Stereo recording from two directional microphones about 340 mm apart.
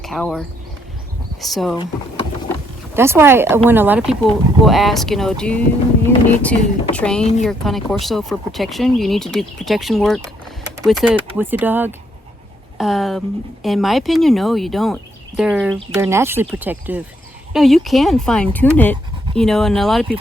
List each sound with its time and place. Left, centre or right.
0.0 s speech: centre
2.9 s speech: centre